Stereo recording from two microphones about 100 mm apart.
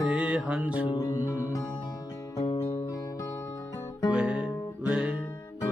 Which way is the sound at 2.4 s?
80° left.